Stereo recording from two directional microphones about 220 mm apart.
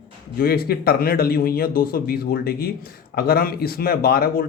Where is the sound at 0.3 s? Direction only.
45° left (ahead or behind).